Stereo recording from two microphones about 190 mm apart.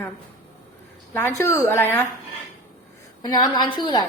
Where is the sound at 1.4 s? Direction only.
15° left (ahead or behind).